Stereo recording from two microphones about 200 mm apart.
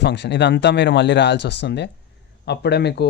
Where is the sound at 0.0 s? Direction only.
60° left (ahead or behind).